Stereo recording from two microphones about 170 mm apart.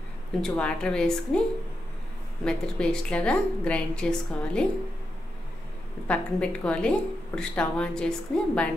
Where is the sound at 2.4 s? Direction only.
5° left (ahead or behind).